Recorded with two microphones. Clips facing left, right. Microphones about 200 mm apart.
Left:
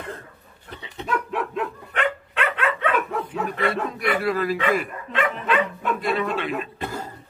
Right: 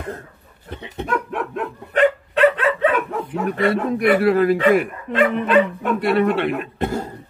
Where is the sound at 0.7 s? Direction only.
55° right (ahead or behind).